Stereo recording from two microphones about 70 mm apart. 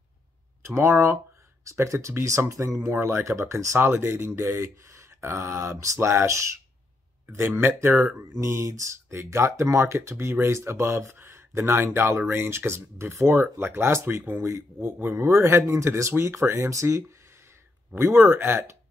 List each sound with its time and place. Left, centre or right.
0.7 s speech: right
8.2 s speech: right